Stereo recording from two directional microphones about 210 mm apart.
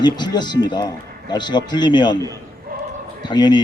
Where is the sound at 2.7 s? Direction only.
45° right (ahead or behind).